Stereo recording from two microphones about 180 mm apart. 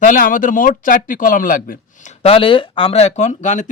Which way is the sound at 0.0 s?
45° left (ahead or behind).